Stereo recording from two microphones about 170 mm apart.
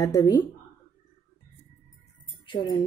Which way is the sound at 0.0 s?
25° left (ahead or behind).